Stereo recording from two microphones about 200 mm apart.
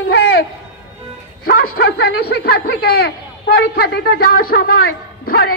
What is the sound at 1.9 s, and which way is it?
Speech, 55° left (ahead or behind).